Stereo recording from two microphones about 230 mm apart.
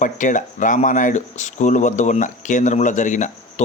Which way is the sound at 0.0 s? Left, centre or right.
Left.